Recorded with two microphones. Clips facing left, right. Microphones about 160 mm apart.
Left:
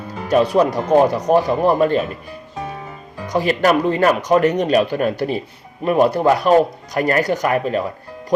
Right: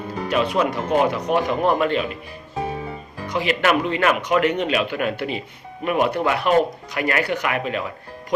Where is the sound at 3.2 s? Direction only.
40° left (ahead or behind).